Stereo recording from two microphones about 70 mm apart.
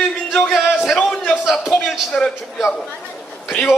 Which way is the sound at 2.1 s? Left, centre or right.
Left.